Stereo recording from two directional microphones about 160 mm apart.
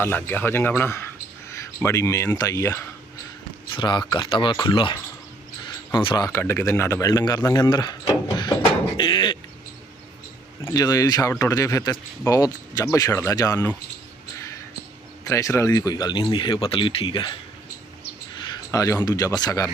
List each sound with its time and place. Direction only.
0.0 s speech: 15° left (ahead or behind)
3.8 s speech: 30° left (ahead or behind)
9.0 s a sound: 30° left (ahead or behind)
10.6 s speech: 20° left (ahead or behind)
15.2 s speech: 20° left (ahead or behind)
18.7 s speech: 20° left (ahead or behind)